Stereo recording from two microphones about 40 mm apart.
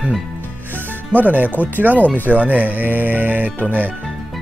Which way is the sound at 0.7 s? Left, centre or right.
Right.